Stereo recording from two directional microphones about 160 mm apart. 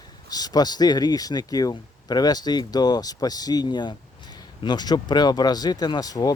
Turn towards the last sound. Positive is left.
turn(degrees=25)  # may be behind; listen again after turning